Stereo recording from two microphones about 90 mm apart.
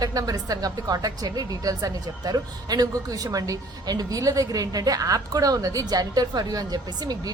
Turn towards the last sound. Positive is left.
turn(degrees=-45)  # may be behind; listen again after turning